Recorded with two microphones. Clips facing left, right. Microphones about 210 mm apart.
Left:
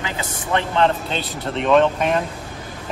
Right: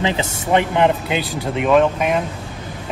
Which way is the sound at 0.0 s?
20° right (ahead or behind).